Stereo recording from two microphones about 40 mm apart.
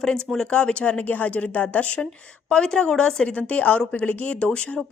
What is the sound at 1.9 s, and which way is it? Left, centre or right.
A woman's voice, left.